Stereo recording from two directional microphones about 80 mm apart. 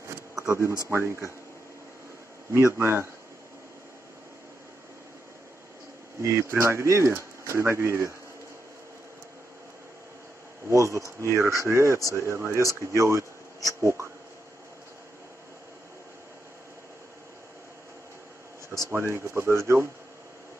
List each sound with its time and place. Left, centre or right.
0.4 s speech: right
2.5 s speech: right
6.2 s speech: right
10.7 s speech: right
18.7 s speech: right